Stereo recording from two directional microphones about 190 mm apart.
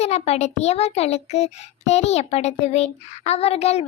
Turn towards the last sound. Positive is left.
turn(degrees=35)  # may be behind; listen again after turning